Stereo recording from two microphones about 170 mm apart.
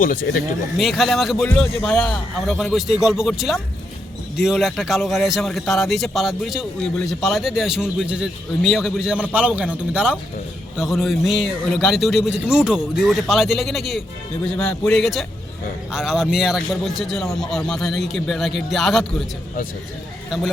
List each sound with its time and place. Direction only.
0.0 s speech: 55° left (ahead or behind)
0.8 s a man's voice: centre (ahead or behind)
20.3 s a man's voice: centre (ahead or behind)